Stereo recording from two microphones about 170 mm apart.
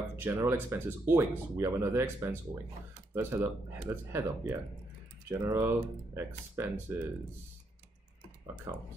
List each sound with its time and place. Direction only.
0.1 s speech: 15° right (ahead or behind)
8.7 s speech: 20° right (ahead or behind)